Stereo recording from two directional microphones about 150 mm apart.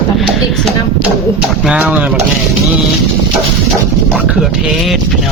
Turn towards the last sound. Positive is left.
turn(degrees=-5)  # may be behind; listen again after turning